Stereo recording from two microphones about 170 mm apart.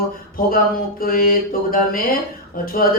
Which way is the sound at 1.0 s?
60° left (ahead or behind).